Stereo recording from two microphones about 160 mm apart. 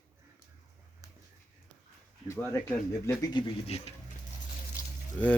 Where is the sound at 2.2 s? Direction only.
15° left (ahead or behind).